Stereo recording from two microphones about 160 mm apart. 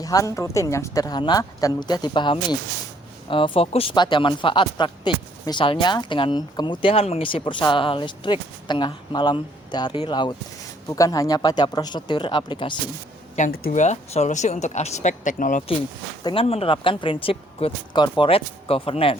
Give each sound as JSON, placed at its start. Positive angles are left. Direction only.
{"t": 0.0, "sound": "speech", "side_deg": 20}
{"t": 13.4, "sound": "speech", "side_deg": 50}
{"t": 16.2, "sound": "speech", "side_deg": 35}